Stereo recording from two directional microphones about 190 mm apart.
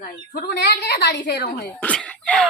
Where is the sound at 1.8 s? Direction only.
5° left (ahead or behind).